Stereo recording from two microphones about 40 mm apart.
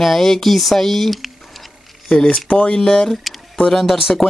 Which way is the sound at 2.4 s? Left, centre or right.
Left.